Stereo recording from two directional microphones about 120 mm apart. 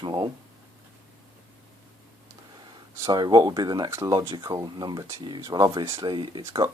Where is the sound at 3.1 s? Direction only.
35° right (ahead or behind).